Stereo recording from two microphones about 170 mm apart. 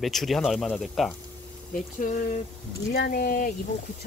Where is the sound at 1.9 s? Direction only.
50° left (ahead or behind).